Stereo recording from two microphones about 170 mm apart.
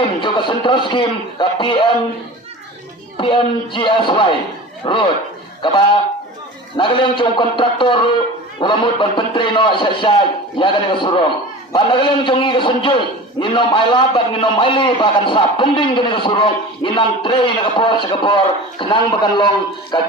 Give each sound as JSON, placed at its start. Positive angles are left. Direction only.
{"t": 0.2, "sound": "a man's voice", "side_deg": 30}
{"t": 3.2, "sound": "a man's voice", "side_deg": 30}